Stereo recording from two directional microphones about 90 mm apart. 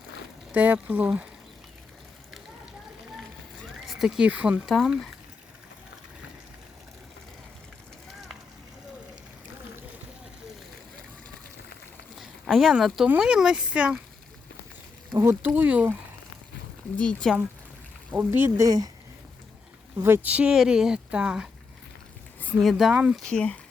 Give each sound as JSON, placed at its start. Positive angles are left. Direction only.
{"t": 0.5, "sound": "speech", "side_deg": -20}
{"t": 3.8, "sound": "a sound", "side_deg": -5}
{"t": 4.3, "sound": "speech", "side_deg": -15}
{"t": 4.6, "sound": "speech", "side_deg": 0}
{"t": 12.2, "sound": "speech", "side_deg": 0}
{"t": 15.4, "sound": "speech", "side_deg": -20}
{"t": 17.0, "sound": "speech", "side_deg": 10}
{"t": 18.3, "sound": "speech", "side_deg": -30}
{"t": 18.6, "sound": "speech", "side_deg": -45}
{"t": 20.0, "sound": "speech", "side_deg": -30}
{"t": 20.2, "sound": "speech", "side_deg": -15}
{"t": 22.5, "sound": "speech", "side_deg": 0}
{"t": 23.1, "sound": "speech", "side_deg": 10}